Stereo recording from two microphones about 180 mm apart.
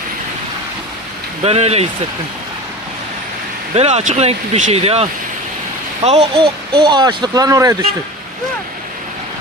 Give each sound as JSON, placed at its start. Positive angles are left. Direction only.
{"t": 1.5, "sound": "speech", "side_deg": -35}
{"t": 3.8, "sound": "speech", "side_deg": -35}
{"t": 6.1, "sound": "speech", "side_deg": -35}